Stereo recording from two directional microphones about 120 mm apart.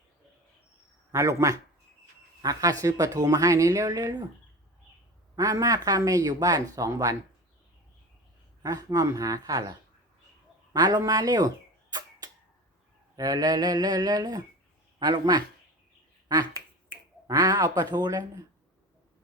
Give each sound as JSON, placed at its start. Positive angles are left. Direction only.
{"t": 1.1, "sound": "speech", "side_deg": -25}
{"t": 5.4, "sound": "speech", "side_deg": -30}
{"t": 8.6, "sound": "speech", "side_deg": -30}
{"t": 10.7, "sound": "a sound", "side_deg": -35}
{"t": 13.1, "sound": "speech", "side_deg": -35}
{"t": 16.3, "sound": "finger snapping", "side_deg": -30}
{"t": 17.2, "sound": "speech", "side_deg": -30}